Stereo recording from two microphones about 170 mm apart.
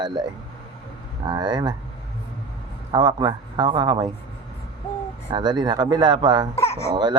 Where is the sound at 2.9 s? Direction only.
25° right (ahead or behind).